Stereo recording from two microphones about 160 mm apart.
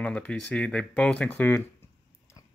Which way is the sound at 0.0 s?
5° left (ahead or behind).